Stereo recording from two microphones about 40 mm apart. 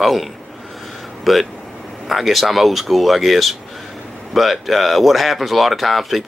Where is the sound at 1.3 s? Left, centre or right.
Centre.